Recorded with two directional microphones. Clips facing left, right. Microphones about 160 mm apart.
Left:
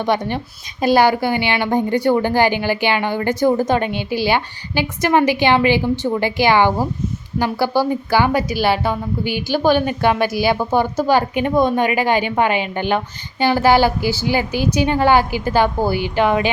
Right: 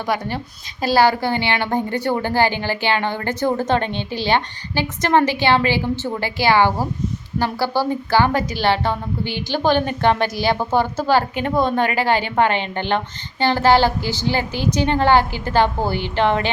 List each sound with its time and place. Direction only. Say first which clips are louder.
0.0 s a woman's voice: left 4 dB; 20° left (ahead or behind)